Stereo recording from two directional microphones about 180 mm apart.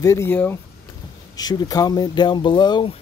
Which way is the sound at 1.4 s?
20° left (ahead or behind).